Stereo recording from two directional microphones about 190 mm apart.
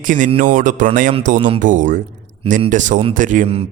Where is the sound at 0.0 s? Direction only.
45° right (ahead or behind).